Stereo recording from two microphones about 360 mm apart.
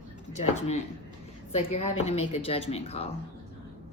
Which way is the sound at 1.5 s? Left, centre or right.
Centre.